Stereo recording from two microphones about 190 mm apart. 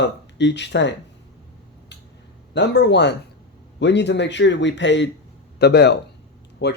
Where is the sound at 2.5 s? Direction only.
65° left (ahead or behind).